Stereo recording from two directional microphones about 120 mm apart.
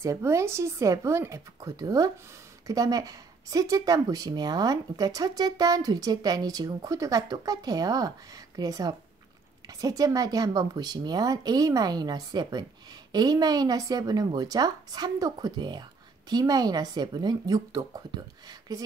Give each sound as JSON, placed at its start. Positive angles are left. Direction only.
{"t": 0.0, "sound": "speech", "side_deg": -25}